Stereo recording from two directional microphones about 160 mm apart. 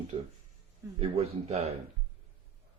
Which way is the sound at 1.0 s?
40° right (ahead or behind).